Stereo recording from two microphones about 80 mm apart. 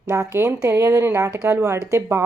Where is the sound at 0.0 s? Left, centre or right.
Right.